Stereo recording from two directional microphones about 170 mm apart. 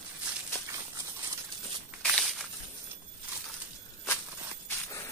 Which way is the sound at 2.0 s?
Centre (ahead or behind).